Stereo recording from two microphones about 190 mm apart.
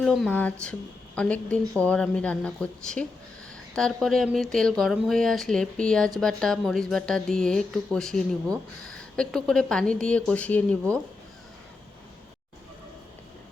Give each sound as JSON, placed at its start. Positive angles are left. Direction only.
{"t": 0.0, "sound": "speech", "side_deg": 0}